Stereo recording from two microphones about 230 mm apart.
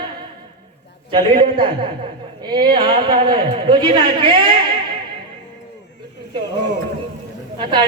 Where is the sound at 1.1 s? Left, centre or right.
Right.